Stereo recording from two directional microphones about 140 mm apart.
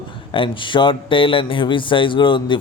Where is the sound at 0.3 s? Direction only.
40° left (ahead or behind).